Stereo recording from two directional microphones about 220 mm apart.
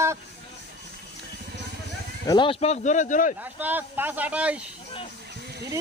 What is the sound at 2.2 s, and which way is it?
Speech, 20° left (ahead or behind).